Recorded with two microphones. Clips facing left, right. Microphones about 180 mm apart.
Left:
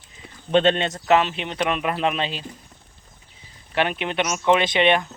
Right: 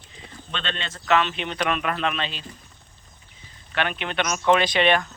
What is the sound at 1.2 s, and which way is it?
Speech, 30° left (ahead or behind).